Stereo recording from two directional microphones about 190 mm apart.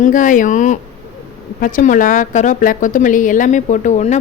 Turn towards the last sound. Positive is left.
turn(degrees=40)  # may be behind; listen again after turning